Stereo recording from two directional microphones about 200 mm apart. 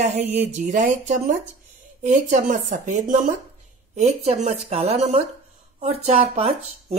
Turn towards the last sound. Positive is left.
turn(degrees=-30)  # may be behind; listen again after turning